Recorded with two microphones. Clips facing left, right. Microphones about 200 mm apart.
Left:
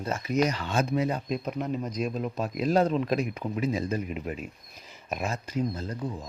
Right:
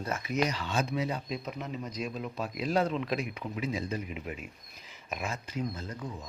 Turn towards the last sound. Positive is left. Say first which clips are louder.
# left 5 dB
turn(degrees=35)  # may be behind; listen again after turning